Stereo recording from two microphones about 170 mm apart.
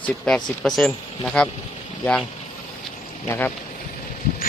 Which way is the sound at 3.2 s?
10° left (ahead or behind).